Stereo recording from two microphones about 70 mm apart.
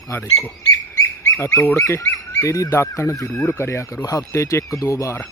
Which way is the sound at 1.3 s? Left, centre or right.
Left.